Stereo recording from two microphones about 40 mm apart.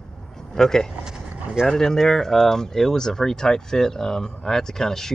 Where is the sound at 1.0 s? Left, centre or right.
Centre.